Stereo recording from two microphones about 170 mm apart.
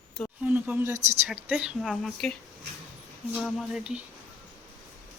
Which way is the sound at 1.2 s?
5° right (ahead or behind).